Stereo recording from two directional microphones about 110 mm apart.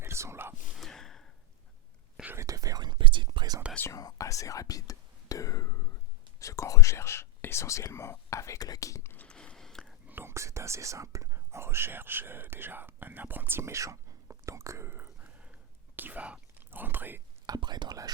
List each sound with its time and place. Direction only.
0.0 s whispering: 25° right (ahead or behind)
0.7 s gasp: centre (ahead or behind)
2.2 s whispering: 25° right (ahead or behind)
3.8 s whispering: 30° left (ahead or behind)
6.4 s speech: 30° left (ahead or behind)
9.1 s a sound: 10° left (ahead or behind)
10.1 s speech: 20° right (ahead or behind)
17.4 s speech: 40° right (ahead or behind)